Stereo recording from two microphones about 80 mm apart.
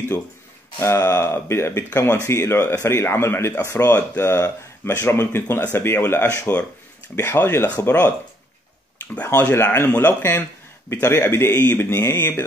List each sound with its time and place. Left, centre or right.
0.7 s speech: left
9.1 s speech: left
10.9 s speech: left